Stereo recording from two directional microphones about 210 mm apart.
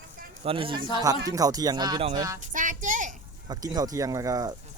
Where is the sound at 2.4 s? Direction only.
40° right (ahead or behind).